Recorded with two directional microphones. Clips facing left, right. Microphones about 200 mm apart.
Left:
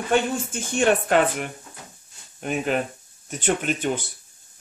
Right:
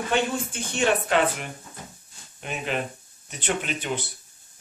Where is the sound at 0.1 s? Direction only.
45° left (ahead or behind).